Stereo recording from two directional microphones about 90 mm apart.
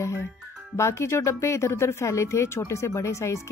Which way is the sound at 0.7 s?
30° left (ahead or behind).